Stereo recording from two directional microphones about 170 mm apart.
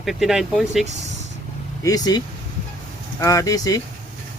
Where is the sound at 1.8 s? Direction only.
20° left (ahead or behind).